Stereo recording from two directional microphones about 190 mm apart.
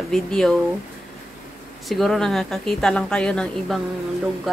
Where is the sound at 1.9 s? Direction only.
Centre (ahead or behind).